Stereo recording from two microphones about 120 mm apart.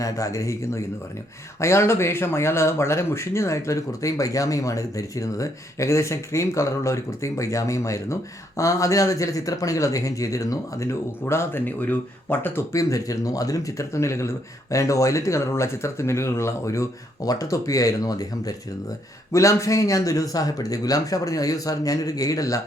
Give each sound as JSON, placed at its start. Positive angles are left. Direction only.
{"t": 0.0, "sound": "speech", "side_deg": 25}